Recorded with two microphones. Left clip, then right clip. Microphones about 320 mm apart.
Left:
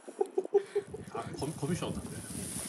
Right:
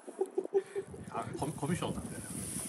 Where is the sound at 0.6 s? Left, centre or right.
Centre.